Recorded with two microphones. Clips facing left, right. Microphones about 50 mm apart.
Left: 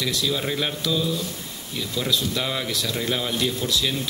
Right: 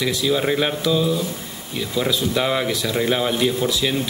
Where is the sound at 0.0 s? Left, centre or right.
Centre.